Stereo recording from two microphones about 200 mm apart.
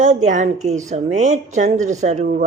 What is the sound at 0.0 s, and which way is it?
Speech, 40° right (ahead or behind).